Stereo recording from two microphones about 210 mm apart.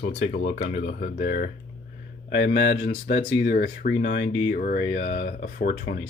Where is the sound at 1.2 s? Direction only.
50° left (ahead or behind).